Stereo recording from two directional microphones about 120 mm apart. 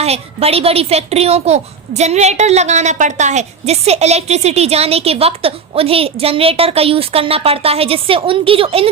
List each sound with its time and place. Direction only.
0.0 s a child's voice: 60° right (ahead or behind)